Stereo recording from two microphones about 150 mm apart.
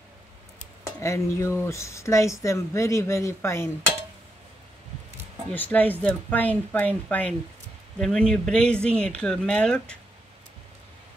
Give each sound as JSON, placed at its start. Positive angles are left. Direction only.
{"t": 1.0, "sound": "speech", "side_deg": 20}
{"t": 5.5, "sound": "speech", "side_deg": 10}